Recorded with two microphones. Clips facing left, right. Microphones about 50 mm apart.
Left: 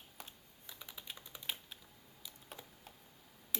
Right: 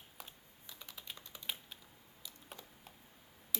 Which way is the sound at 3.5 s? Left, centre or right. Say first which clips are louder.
Left 1 dB; left.